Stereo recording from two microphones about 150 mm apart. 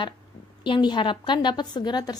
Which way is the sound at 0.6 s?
30° left (ahead or behind).